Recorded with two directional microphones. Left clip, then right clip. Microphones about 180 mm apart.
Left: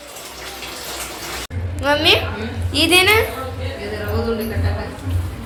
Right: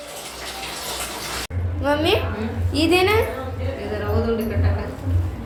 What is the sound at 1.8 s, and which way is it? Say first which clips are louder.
A woman's voice: left 5 dB; 10° right (ahead or behind).